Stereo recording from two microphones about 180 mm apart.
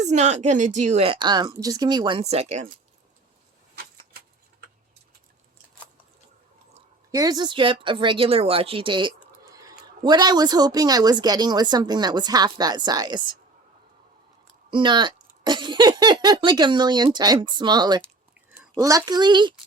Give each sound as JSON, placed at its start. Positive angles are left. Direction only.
{"t": 0.0, "sound": "a woman's voice", "side_deg": -40}
{"t": 7.1, "sound": "speech", "side_deg": -20}
{"t": 14.7, "sound": "speech", "side_deg": -25}